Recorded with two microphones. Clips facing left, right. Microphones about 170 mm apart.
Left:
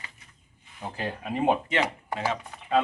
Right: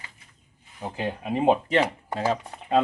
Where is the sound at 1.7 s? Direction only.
35° right (ahead or behind).